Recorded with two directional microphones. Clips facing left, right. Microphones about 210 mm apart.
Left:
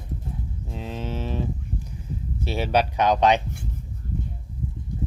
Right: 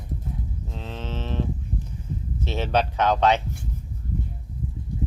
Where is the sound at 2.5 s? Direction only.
10° left (ahead or behind).